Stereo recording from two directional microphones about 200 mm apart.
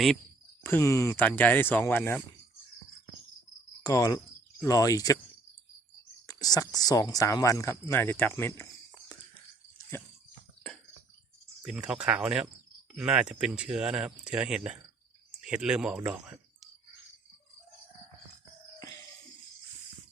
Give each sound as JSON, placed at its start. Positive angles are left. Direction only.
{"t": 0.6, "sound": "speech", "side_deg": 10}
{"t": 3.8, "sound": "speech", "side_deg": 20}
{"t": 6.2, "sound": "whispering", "side_deg": 20}
{"t": 6.7, "sound": "speech", "side_deg": 20}
{"t": 9.9, "sound": "drip", "side_deg": 10}
{"t": 11.6, "sound": "speech", "side_deg": 0}